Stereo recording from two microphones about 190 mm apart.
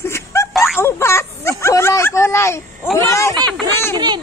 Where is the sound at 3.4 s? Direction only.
5° left (ahead or behind).